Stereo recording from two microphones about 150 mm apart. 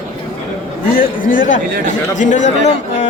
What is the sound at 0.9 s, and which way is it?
A man's voice, 70° left (ahead or behind).